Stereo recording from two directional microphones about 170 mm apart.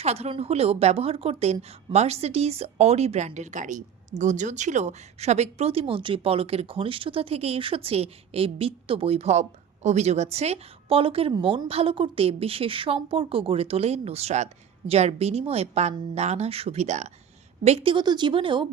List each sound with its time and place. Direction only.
0.0 s a woman's voice: 40° right (ahead or behind)